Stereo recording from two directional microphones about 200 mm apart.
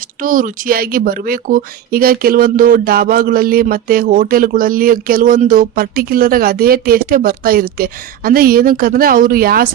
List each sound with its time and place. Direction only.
0.2 s speech: 45° right (ahead or behind)